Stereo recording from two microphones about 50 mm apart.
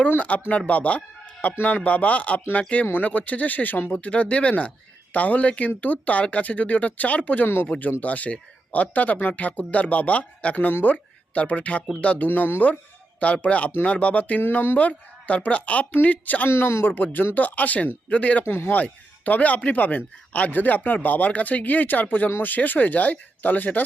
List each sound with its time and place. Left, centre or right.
0.2 s speech: left
4.0 s speech: left
7.4 s speech: left
7.7 s speech: left
10.7 s speech: left
10.9 s speech: left
13.1 s speech: left
14.5 s speech: left
14.8 s speech: left
16.5 s speech: left
18.4 s speech: left
18.7 s speech: left